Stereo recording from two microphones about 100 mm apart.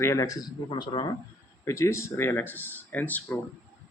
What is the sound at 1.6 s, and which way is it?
Speech, 30° left (ahead or behind).